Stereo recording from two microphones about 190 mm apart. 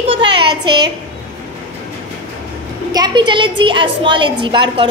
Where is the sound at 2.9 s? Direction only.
25° right (ahead or behind).